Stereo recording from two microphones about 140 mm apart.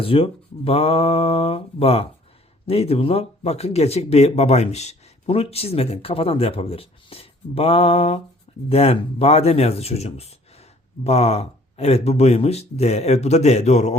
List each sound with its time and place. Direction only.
0.0 s speech: 40° left (ahead or behind)